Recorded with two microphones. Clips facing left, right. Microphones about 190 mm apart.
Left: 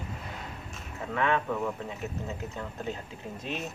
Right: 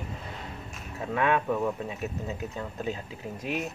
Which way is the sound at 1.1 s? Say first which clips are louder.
Right 2 dB; 15° right (ahead or behind).